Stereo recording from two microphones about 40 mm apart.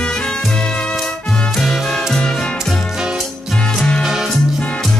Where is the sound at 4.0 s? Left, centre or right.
Centre.